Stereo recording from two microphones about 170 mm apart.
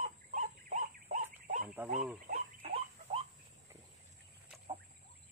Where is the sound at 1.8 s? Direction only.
10° right (ahead or behind).